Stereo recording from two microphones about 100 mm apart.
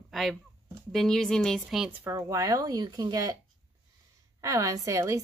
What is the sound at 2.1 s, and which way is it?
A woman's voice, 35° right (ahead or behind).